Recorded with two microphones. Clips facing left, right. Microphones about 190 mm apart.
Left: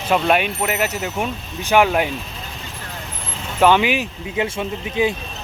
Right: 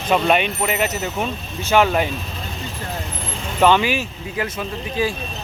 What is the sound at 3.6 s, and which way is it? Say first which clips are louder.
Speech: left 1 dB; 15° left (ahead or behind).